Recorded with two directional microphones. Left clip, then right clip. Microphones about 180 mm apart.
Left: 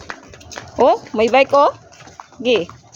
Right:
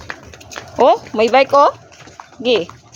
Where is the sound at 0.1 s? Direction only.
20° left (ahead or behind).